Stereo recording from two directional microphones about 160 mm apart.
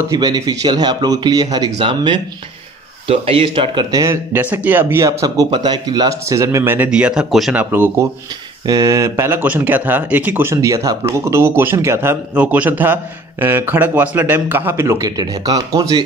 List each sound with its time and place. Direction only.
0.1 s speech: 25° right (ahead or behind); by 7.6 s centre (ahead or behind)
7.7 s speech: 15° right (ahead or behind)